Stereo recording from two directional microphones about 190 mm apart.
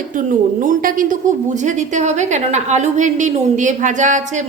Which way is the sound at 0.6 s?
45° right (ahead or behind).